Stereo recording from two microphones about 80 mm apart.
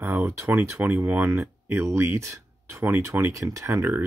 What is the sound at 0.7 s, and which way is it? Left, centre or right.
Speech, right.